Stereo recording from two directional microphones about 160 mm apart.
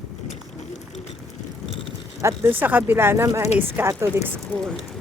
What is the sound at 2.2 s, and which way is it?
Speech, 20° right (ahead or behind).